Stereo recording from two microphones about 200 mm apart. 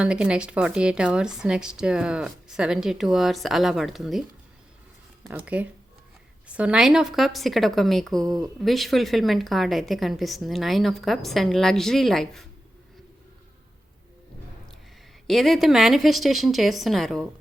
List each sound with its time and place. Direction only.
0.0 s a woman's voice: 5° right (ahead or behind)
5.3 s a woman's voice: 5° right (ahead or behind)
8.2 s speech: 20° right (ahead or behind)
8.6 s a woman's voice: centre (ahead or behind)
15.3 s a woman's voice: centre (ahead or behind)